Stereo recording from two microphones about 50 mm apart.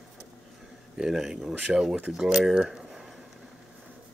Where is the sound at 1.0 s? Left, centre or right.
Centre.